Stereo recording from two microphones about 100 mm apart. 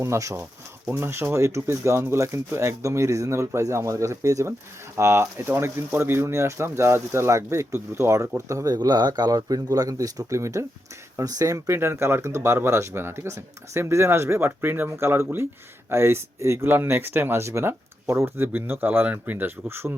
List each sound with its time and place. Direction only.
0.0 s speech: 30° right (ahead or behind)